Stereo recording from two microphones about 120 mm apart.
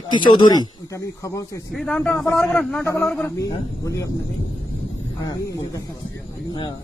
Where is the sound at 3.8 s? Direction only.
30° left (ahead or behind).